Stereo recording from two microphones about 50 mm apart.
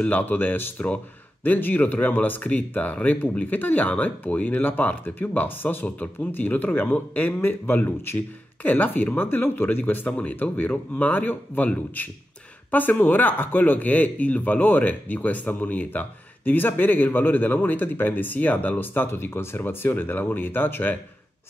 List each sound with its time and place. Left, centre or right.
0.0 s a man's voice: left
8.6 s a man's voice: left